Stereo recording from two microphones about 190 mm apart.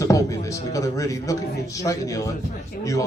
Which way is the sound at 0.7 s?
15° left (ahead or behind).